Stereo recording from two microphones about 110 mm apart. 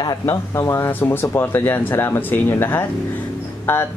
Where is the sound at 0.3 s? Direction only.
30° left (ahead or behind).